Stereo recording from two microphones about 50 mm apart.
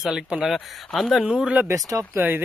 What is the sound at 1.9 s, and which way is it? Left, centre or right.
Speech, right.